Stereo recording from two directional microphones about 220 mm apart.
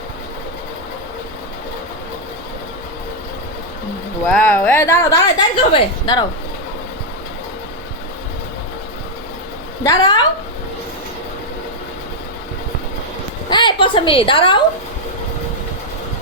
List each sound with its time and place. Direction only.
4.3 s a woman's voice: 5° left (ahead or behind)
9.8 s a woman's voice: 15° left (ahead or behind)
13.5 s a woman's voice: 20° left (ahead or behind)